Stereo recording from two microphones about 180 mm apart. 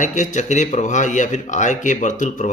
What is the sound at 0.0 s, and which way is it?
Speech, 45° left (ahead or behind).